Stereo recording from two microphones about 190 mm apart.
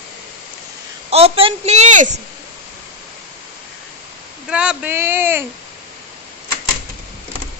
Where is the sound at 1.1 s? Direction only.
30° right (ahead or behind).